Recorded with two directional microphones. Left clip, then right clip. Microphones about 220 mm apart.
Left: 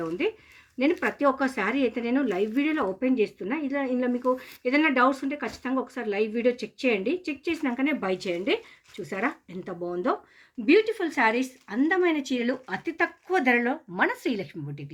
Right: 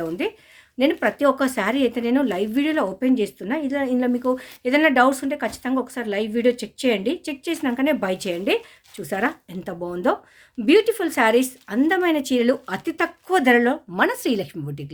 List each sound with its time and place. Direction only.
0.2 s speech: 50° right (ahead or behind)